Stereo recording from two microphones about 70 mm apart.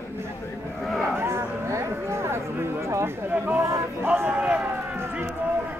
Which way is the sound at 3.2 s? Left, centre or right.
Right.